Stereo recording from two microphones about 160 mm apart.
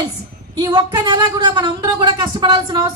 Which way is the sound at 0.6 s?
25° right (ahead or behind).